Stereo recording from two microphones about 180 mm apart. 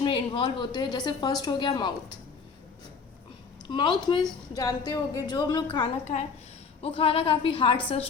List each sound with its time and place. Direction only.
0.0 s a woman's voice: 25° left (ahead or behind)
3.7 s a woman's voice: 25° left (ahead or behind)